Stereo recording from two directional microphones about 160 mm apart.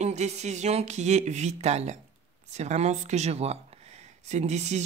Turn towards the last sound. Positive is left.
turn(degrees=-45)  # may be behind; listen again after turning